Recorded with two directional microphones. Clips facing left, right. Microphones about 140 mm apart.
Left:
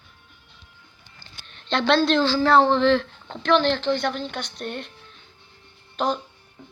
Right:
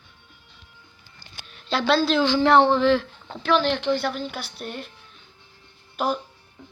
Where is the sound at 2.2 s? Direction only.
20° right (ahead or behind).